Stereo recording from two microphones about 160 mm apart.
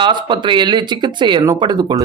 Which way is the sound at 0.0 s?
30° right (ahead or behind).